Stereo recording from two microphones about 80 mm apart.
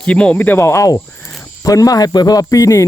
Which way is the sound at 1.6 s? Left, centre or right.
Left.